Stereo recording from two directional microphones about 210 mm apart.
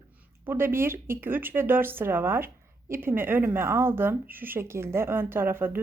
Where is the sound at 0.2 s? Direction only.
10° right (ahead or behind).